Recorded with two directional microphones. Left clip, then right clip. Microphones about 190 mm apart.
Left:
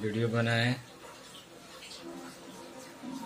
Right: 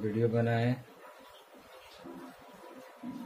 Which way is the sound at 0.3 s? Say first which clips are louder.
Left 1 dB; 5° left (ahead or behind).